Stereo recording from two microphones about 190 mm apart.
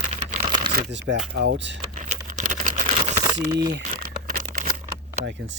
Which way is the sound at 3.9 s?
45° right (ahead or behind).